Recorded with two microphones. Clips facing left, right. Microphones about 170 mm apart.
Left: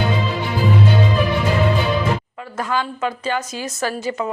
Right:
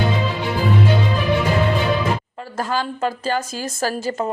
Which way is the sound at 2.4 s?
35° right (ahead or behind).